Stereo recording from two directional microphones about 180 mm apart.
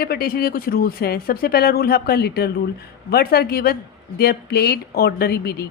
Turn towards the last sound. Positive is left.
turn(degrees=60)  # may be behind; listen again after turning